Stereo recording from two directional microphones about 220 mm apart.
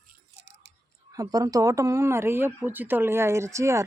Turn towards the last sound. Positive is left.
turn(degrees=-15)  # may be behind; listen again after turning